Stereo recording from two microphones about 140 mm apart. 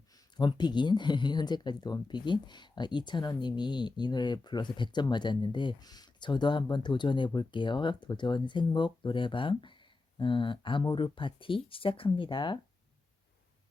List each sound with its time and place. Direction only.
0.3 s speech: 30° left (ahead or behind)